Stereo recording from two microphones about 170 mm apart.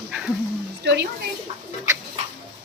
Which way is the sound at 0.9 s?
90° right.